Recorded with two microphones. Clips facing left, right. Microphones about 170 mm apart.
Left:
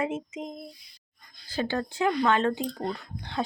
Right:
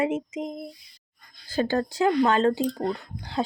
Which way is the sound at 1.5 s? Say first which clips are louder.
Right 5 dB; 45° right (ahead or behind).